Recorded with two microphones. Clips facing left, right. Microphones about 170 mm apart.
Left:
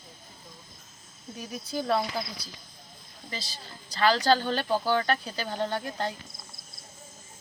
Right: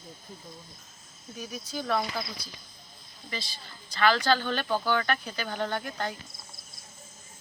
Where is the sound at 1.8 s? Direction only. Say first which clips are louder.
Left 2 dB; 30° left (ahead or behind).